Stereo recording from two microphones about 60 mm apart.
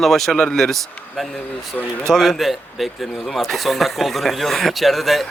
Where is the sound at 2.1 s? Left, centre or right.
Centre.